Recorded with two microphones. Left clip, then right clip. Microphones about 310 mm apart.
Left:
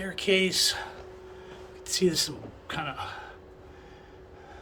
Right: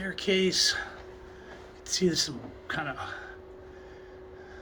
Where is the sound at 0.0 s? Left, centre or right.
Centre.